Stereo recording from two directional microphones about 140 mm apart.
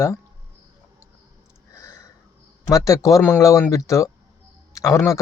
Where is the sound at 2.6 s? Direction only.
25° left (ahead or behind).